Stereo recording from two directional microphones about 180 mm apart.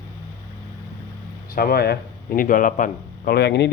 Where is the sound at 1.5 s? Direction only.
60° left (ahead or behind).